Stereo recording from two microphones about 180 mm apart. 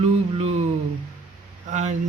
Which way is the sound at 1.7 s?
40° right (ahead or behind).